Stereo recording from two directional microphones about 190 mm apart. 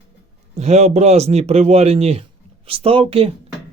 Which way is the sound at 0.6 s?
35° right (ahead or behind).